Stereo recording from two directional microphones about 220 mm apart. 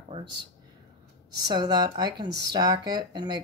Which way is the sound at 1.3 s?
20° right (ahead or behind).